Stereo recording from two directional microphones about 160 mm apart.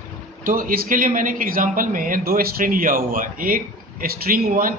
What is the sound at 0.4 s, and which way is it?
A man's voice, 60° right (ahead or behind).